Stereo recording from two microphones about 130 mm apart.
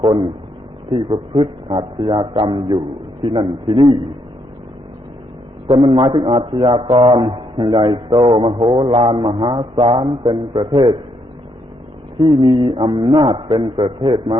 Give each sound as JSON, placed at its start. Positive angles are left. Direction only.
{"t": 0.0, "sound": "a man's voice", "side_deg": -40}
{"t": 5.6, "sound": "a man's voice", "side_deg": -40}
{"t": 12.2, "sound": "a man's voice", "side_deg": -40}